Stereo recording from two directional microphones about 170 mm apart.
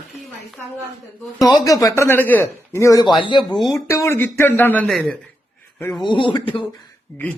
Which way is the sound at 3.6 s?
Centre (ahead or behind).